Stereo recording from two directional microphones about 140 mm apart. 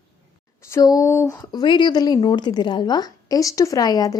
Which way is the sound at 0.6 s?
20° left (ahead or behind).